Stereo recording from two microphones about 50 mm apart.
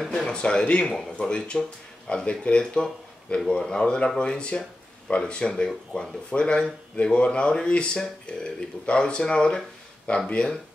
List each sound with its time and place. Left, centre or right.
0.3 s speech: centre